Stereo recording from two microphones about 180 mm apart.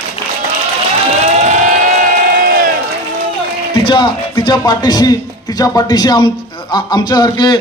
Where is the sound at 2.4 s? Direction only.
50° right (ahead or behind).